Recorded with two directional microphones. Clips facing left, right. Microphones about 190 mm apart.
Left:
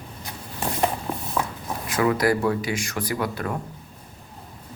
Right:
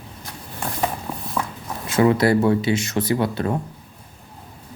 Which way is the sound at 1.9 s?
25° right (ahead or behind).